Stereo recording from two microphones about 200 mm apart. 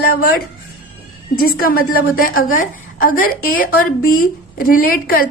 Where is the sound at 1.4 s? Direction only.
45° left (ahead or behind).